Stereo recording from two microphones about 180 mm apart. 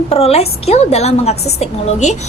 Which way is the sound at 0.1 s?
35° left (ahead or behind).